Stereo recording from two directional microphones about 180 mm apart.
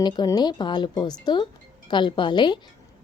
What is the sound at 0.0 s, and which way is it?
A woman's voice, 25° left (ahead or behind).